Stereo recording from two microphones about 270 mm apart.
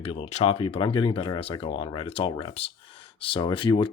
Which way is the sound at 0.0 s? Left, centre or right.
Left.